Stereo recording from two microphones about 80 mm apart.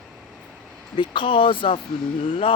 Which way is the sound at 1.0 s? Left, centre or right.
Left.